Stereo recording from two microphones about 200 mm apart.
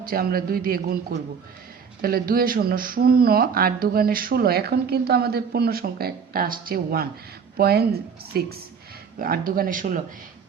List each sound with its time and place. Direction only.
0.0 s speech: 45° right (ahead or behind)